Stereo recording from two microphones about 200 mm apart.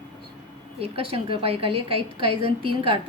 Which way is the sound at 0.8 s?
30° right (ahead or behind).